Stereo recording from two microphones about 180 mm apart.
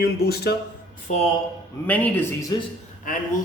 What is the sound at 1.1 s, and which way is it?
Speech, 40° left (ahead or behind).